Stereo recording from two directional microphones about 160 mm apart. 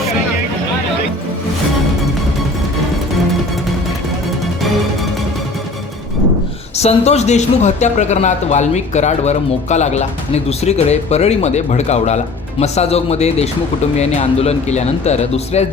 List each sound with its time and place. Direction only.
6.7 s speech: 40° left (ahead or behind)